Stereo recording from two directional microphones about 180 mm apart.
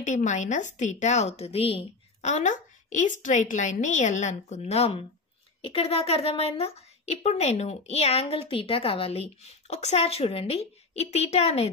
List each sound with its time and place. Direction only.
0.0 s a woman's voice: 40° left (ahead or behind)